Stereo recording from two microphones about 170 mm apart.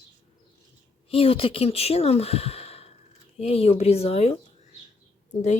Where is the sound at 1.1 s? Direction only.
35° left (ahead or behind).